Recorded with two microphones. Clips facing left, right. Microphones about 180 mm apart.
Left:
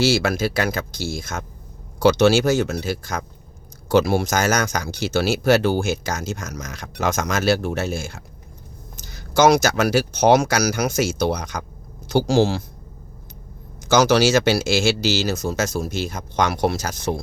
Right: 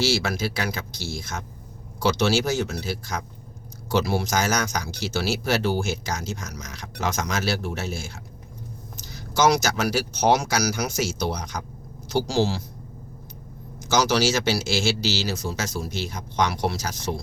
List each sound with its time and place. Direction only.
0.0 s speech: 50° left (ahead or behind)
3.8 s speech: 50° left (ahead or behind)
13.8 s speech: 55° left (ahead or behind)